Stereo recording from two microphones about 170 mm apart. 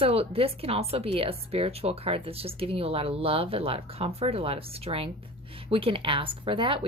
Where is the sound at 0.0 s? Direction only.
35° right (ahead or behind).